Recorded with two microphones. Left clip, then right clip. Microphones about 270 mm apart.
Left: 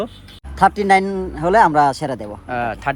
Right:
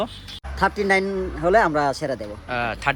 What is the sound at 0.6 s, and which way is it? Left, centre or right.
A man's voice, left.